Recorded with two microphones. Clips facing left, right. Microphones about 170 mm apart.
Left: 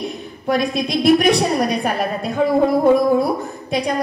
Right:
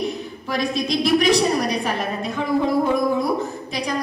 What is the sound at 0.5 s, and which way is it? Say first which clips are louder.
A woman's voice: left 4 dB; 60° left (ahead or behind).